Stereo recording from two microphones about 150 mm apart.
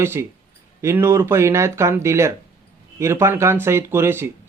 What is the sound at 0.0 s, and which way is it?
Speech, 15° right (ahead or behind).